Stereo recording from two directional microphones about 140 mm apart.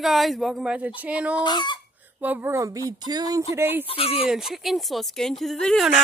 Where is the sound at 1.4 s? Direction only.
30° left (ahead or behind).